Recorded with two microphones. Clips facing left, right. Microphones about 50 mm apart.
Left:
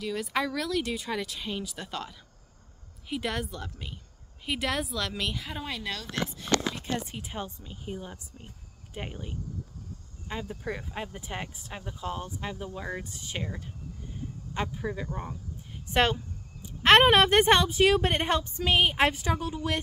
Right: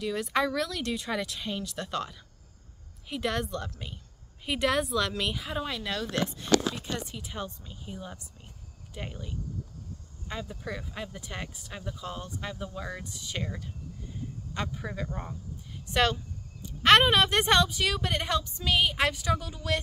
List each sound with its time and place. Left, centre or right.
0.0 s speech: centre
7.1 s speech: left
8.9 s speech: left
10.5 s speech: centre
13.4 s speech: centre
14.7 s speech: centre
15.9 s speech: left
16.6 s a sound: centre
17.0 s speech: left